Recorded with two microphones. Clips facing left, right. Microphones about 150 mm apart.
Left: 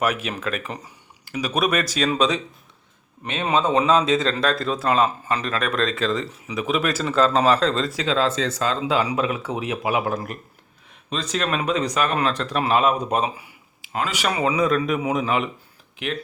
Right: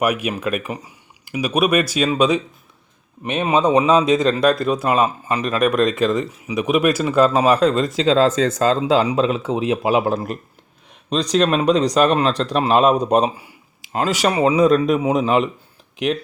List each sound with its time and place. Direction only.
0.0 s speech: 10° right (ahead or behind)
8.0 s speech: 40° right (ahead or behind)